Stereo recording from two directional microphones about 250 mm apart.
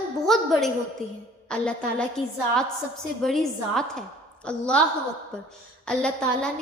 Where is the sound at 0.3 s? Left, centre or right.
Centre.